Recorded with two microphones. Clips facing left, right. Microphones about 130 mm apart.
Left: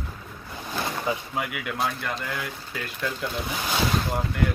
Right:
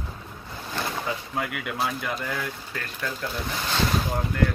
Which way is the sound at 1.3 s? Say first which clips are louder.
Even; 5° left (ahead or behind).